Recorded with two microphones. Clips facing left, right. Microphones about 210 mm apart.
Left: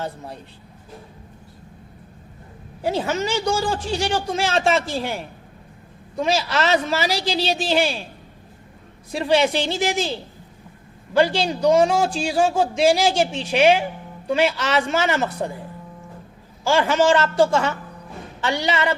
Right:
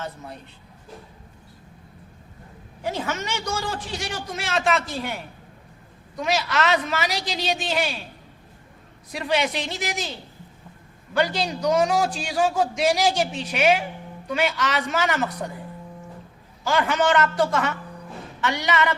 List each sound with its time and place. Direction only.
0.0 s a man's voice: 30° left (ahead or behind)
2.8 s a man's voice: 30° left (ahead or behind)
9.1 s a man's voice: 30° left (ahead or behind)
11.2 s a man's voice: 30° left (ahead or behind)
16.6 s a man's voice: 30° left (ahead or behind)